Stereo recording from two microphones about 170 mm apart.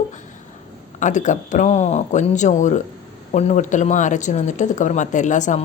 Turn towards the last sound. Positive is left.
turn(degrees=45)  # may be behind; listen again after turning